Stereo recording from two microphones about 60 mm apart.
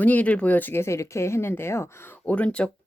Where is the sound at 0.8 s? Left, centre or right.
Left.